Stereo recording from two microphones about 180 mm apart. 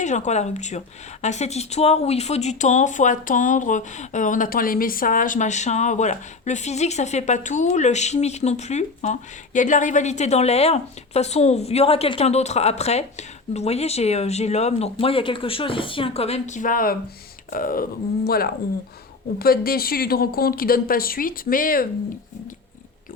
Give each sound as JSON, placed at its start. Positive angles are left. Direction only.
{"t": 0.0, "sound": "speech", "side_deg": 40}